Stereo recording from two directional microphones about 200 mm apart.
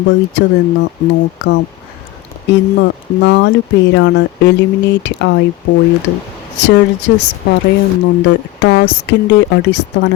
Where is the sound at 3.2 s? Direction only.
60° left (ahead or behind).